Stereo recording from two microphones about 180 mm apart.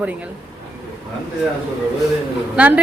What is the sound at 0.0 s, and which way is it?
Speech, 5° right (ahead or behind).